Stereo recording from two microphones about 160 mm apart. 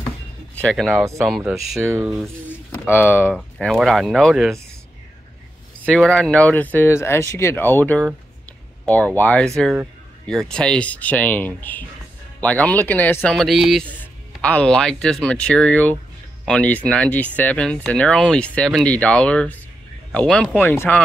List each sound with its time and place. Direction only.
0.6 s speech: centre (ahead or behind)
0.9 s speech: 20° right (ahead or behind)
1.2 s speech: centre (ahead or behind)
2.5 s a sound: 10° left (ahead or behind)
3.3 s speech: centre (ahead or behind)
5.9 s speech: 5° left (ahead or behind)